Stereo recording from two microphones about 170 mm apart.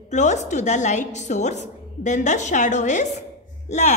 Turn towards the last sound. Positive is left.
turn(degrees=40)  # may be behind; listen again after turning